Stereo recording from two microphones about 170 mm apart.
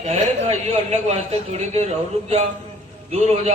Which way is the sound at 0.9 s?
40° right (ahead or behind).